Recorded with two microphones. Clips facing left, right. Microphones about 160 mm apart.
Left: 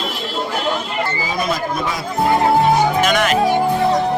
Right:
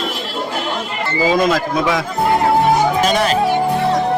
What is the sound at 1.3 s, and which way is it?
Speech, 90° right.